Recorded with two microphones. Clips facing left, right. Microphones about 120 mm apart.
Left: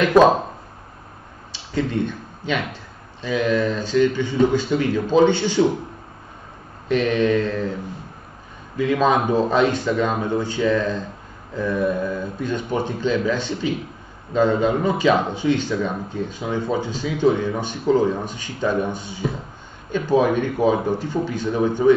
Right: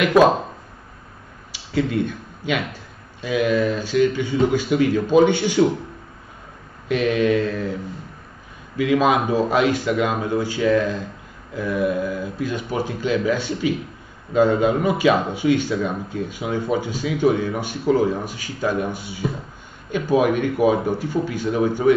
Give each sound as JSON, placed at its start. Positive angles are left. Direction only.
{"t": 0.0, "sound": "speech", "side_deg": -10}
{"t": 1.5, "sound": "speech", "side_deg": -10}
{"t": 6.9, "sound": "speech", "side_deg": -10}
{"t": 8.7, "sound": "speech", "side_deg": -10}